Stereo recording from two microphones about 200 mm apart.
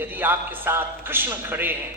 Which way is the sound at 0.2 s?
10° right (ahead or behind).